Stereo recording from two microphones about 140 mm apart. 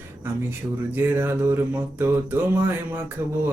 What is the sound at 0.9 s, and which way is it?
Speech, 15° right (ahead or behind).